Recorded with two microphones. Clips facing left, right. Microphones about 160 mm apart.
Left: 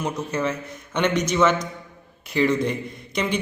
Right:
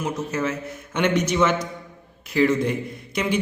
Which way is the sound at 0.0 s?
5° right (ahead or behind).